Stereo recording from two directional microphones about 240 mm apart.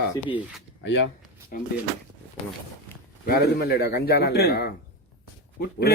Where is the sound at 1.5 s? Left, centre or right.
Left.